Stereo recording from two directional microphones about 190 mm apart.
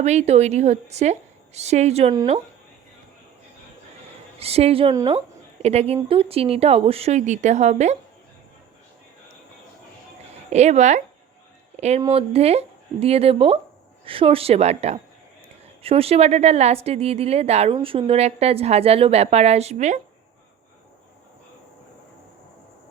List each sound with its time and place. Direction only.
0.0 s a woman's voice: 35° right (ahead or behind)
4.4 s a woman's voice: 30° right (ahead or behind)
10.5 s a woman's voice: 35° right (ahead or behind)